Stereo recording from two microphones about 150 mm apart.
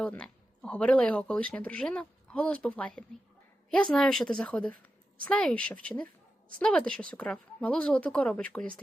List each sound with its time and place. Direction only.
0.0 s a woman's voice: 5° left (ahead or behind)